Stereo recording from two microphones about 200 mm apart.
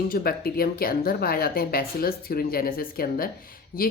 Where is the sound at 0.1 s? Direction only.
50° left (ahead or behind).